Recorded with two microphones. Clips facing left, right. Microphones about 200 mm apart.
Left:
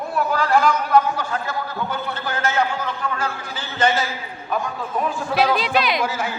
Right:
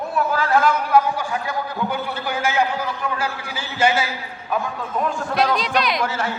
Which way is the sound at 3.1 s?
10° right (ahead or behind).